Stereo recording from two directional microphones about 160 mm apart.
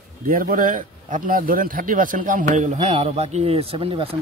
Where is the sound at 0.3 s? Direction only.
60° right (ahead or behind).